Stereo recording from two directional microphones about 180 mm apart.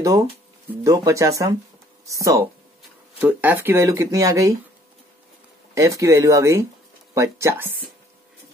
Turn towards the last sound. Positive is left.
turn(degrees=-15)  # may be behind; listen again after turning